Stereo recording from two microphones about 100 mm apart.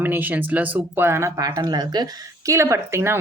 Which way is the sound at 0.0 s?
20° right (ahead or behind).